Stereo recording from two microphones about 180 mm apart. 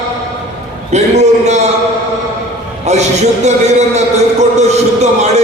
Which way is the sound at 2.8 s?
40° right (ahead or behind).